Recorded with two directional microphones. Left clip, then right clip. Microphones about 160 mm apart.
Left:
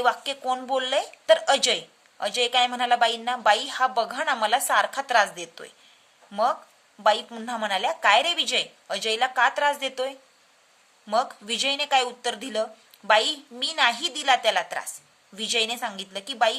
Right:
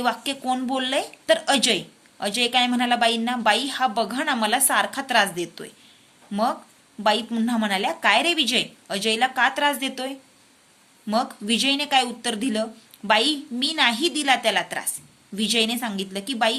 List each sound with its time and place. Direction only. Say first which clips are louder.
0.0 s a woman's voice: left 1 dB; 30° left (ahead or behind)